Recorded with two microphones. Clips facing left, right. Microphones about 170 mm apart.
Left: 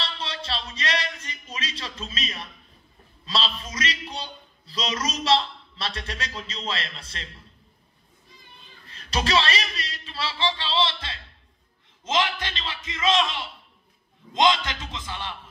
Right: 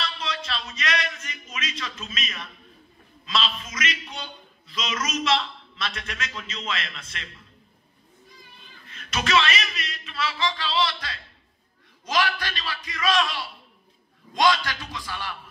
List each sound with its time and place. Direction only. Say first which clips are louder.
0.0 s a sound: right 2 dB; 30° left (ahead or behind)
3.3 s a man's voice: right 1 dB; 35° left (ahead or behind)
8.8 s a man's voice: left 2 dB; 35° left (ahead or behind)